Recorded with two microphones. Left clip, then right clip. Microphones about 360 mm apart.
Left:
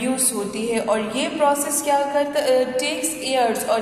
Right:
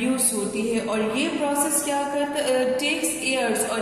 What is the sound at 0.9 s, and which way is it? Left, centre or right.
A woman's voice, centre.